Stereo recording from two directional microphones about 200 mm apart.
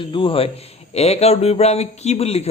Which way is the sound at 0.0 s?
25° left (ahead or behind).